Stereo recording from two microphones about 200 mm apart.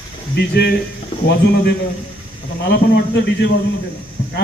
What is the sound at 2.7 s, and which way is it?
Speech, 55° left (ahead or behind).